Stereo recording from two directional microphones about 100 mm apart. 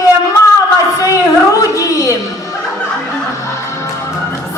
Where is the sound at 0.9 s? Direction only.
35° left (ahead or behind).